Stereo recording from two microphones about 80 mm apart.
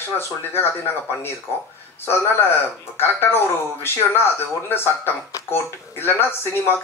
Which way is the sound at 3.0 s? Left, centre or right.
Left.